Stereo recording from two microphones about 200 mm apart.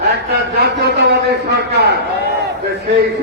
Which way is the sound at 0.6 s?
55° right (ahead or behind).